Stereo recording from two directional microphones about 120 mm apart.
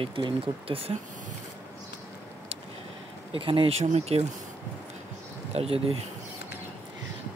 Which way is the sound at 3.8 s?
60° right (ahead or behind).